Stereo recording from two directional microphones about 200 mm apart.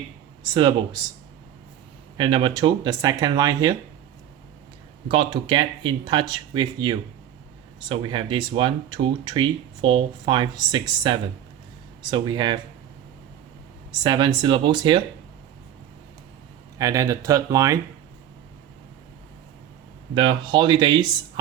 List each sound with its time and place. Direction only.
0.4 s speech: 20° right (ahead or behind)
2.1 s speech: 25° right (ahead or behind)
5.0 s speech: 25° right (ahead or behind)
14.0 s speech: 20° right (ahead or behind)
16.7 s speech: 15° right (ahead or behind)
20.1 s speech: 25° right (ahead or behind)